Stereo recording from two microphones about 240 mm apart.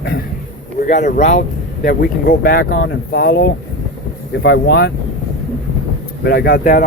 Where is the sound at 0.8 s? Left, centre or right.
Left.